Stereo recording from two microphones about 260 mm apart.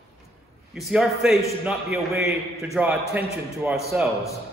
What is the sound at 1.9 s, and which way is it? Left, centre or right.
Speech, right.